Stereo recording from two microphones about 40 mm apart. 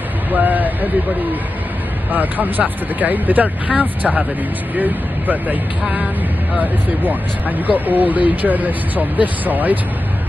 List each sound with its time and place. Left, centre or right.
0.3 s speech: right
2.1 s speech: right
6.6 s speech: right